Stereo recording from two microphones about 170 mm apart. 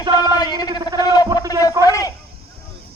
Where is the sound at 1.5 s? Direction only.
20° left (ahead or behind).